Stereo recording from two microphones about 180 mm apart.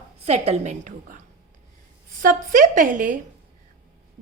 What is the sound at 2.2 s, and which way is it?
Speech, 45° right (ahead or behind).